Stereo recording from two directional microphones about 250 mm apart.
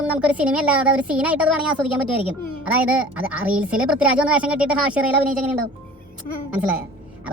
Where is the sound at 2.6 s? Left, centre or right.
Centre.